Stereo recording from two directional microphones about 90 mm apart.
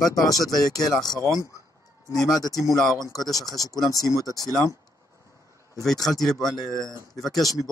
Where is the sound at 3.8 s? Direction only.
45° left (ahead or behind).